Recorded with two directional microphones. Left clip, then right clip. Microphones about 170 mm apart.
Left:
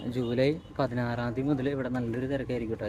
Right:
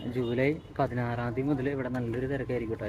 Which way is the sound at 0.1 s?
15° left (ahead or behind).